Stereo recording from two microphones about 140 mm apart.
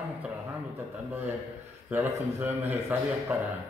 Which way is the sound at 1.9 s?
15° right (ahead or behind).